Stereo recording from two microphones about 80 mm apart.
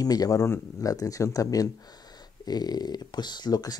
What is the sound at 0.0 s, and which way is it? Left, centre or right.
Speech, left.